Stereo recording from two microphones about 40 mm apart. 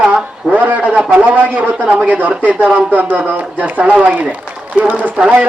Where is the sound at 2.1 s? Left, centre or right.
Right.